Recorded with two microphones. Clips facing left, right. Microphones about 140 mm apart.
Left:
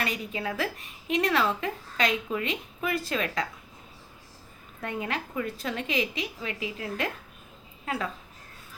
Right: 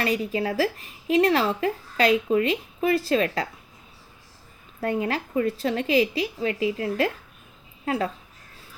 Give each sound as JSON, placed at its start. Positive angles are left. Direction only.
{"t": 0.0, "sound": "speech", "side_deg": -35}
{"t": 4.8, "sound": "speech", "side_deg": -35}